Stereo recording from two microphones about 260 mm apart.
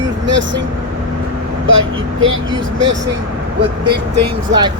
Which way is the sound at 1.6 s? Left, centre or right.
Right.